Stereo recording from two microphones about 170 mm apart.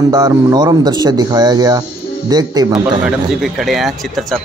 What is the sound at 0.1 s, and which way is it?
Speech, 25° right (ahead or behind).